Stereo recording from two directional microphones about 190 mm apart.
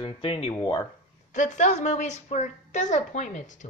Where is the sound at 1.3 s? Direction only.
40° left (ahead or behind).